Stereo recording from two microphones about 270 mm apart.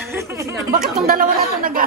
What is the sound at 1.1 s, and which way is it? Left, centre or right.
Speech, right.